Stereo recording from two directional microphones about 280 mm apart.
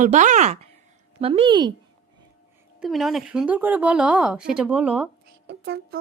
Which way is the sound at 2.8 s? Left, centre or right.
Centre.